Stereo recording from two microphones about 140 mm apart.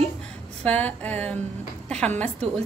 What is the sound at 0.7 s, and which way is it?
A woman's voice, 10° left (ahead or behind).